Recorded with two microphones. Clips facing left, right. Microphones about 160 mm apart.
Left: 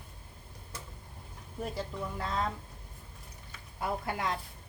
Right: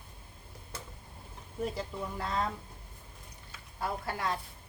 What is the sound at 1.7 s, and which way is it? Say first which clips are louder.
Speech: even; centre (ahead or behind).